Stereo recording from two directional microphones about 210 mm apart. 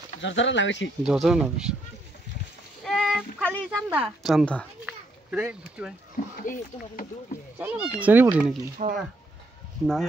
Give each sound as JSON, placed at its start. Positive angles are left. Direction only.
{"t": 0.2, "sound": "speech", "side_deg": 60}
{"t": 1.0, "sound": "a woman's voice", "side_deg": -5}
{"t": 2.8, "sound": "a sound", "side_deg": 0}
{"t": 3.7, "sound": "a woman's voice", "side_deg": -5}
{"t": 4.8, "sound": "children playing", "side_deg": -5}
{"t": 5.8, "sound": "speech", "side_deg": -5}
{"t": 6.4, "sound": "speech", "side_deg": 40}
{"t": 7.5, "sound": "speech", "side_deg": -5}
{"t": 8.8, "sound": "speech", "side_deg": -35}